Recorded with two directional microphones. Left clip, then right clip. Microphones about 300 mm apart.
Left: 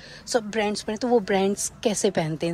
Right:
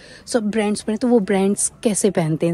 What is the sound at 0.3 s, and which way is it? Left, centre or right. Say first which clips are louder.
Speech: right 4 dB; right.